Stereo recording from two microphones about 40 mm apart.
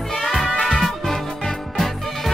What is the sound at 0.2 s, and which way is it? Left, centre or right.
Music, centre.